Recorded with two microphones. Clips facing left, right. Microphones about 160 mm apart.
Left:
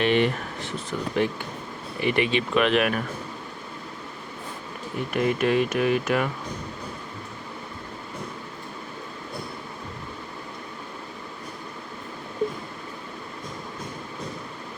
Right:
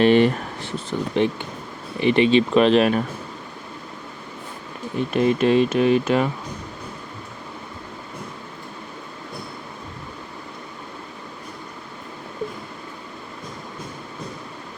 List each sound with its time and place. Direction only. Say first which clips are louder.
0.0 s a sound: right 6 dB; 35° right (ahead or behind)
0.9 s speech: right 4 dB; 25° right (ahead or behind)
5.1 s speech: right 5 dB; 25° right (ahead or behind)